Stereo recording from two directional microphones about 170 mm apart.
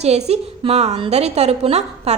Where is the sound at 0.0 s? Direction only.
40° right (ahead or behind).